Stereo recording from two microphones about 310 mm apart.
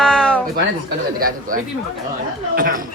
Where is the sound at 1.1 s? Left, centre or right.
Right.